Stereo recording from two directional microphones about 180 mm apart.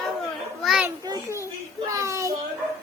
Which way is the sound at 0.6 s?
Centre (ahead or behind).